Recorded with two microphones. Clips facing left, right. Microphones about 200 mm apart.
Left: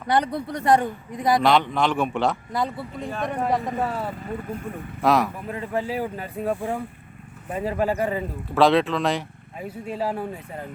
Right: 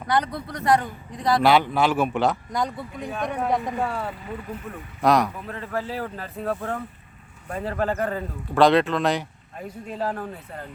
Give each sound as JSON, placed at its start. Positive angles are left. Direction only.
{"t": 0.1, "sound": "speech", "side_deg": 30}
{"t": 1.4, "sound": "speech", "side_deg": -5}
{"t": 5.5, "sound": "speech", "side_deg": 15}